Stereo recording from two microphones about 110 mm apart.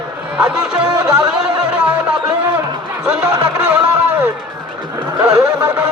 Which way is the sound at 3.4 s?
10° right (ahead or behind).